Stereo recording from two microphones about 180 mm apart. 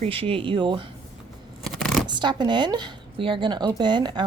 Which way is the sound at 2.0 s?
25° right (ahead or behind).